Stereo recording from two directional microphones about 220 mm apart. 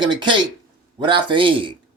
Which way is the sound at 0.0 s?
20° right (ahead or behind).